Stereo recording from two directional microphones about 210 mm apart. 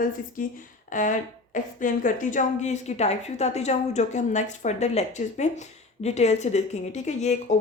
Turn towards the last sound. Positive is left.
turn(degrees=35)  # may be behind; listen again after turning